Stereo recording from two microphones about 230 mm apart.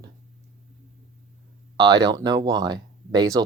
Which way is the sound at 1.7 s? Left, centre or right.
Centre.